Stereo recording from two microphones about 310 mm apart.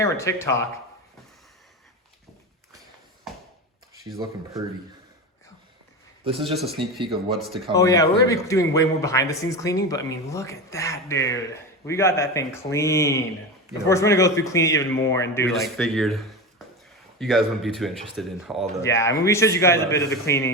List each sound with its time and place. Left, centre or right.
0.0 s a man's voice: centre
6.2 s speech: centre
7.7 s a man's voice: centre